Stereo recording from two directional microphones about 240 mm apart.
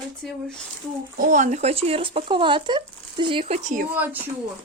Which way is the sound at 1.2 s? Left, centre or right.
Right.